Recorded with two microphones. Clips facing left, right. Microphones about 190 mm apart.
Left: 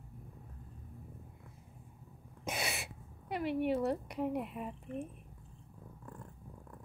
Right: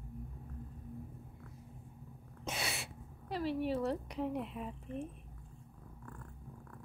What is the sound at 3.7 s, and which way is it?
Speech, 10° left (ahead or behind).